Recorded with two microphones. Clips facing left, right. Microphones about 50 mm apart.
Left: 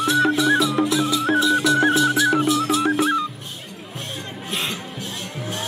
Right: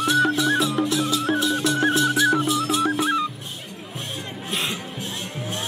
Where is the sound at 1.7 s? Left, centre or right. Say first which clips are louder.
Left 3 dB; left.